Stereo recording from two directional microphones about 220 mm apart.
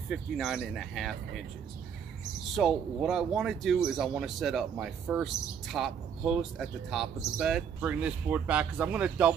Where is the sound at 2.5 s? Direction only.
Centre (ahead or behind).